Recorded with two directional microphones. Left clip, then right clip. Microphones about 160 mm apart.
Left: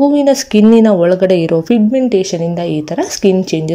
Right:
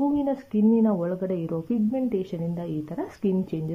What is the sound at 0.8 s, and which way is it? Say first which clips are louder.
Speech: left 17 dB; 30° left (ahead or behind).